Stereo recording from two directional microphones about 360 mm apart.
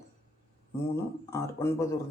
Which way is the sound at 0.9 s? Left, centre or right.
Centre.